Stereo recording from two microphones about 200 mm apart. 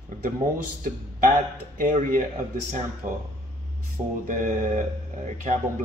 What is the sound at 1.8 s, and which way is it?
Speech, 40° right (ahead or behind).